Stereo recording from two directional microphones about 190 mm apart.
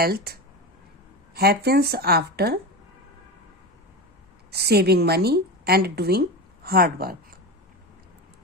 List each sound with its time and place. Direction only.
0.0 s speech: 55° right (ahead or behind)
4.5 s a woman's voice: 60° right (ahead or behind)